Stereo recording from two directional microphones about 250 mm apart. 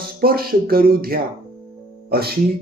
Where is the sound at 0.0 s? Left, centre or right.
Right.